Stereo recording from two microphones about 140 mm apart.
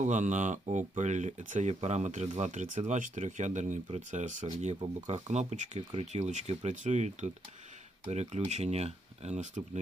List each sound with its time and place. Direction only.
0.0 s speech: 60° right (ahead or behind)